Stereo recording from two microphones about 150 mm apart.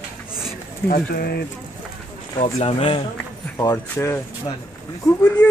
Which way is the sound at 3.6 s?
15° left (ahead or behind).